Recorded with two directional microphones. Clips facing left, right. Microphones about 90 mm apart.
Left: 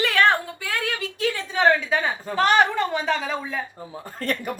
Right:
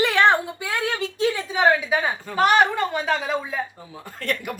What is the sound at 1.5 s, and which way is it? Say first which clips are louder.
A woman's voice: left 1 dB; 10° right (ahead or behind).